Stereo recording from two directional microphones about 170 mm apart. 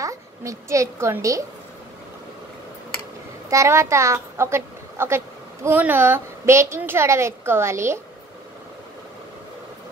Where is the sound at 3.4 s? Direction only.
15° right (ahead or behind).